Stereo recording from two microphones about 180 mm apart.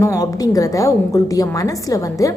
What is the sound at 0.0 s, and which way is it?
A woman's voice, 20° left (ahead or behind).